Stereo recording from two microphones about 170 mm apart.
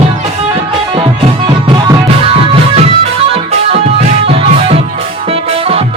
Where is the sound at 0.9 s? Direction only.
30° right (ahead or behind).